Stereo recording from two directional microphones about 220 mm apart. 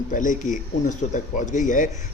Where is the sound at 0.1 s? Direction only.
35° left (ahead or behind).